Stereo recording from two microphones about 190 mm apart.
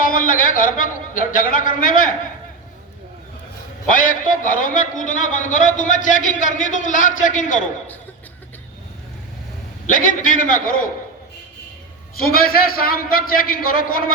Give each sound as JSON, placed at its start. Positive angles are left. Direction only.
{"t": 0.0, "sound": "a man's voice", "side_deg": 45}
{"t": 3.8, "sound": "a man's voice", "side_deg": 45}
{"t": 9.9, "sound": "a man's voice", "side_deg": 45}
{"t": 12.2, "sound": "a man's voice", "side_deg": 50}